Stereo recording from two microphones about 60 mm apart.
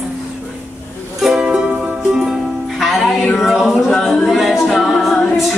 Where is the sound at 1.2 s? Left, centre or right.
Centre.